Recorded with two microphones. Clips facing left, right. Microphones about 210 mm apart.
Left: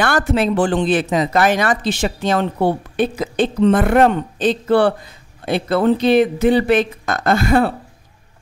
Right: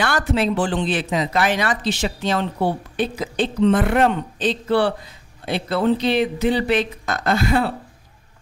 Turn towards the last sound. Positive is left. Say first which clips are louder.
# left 4 dB
turn(degrees=50)  # may be behind; listen again after turning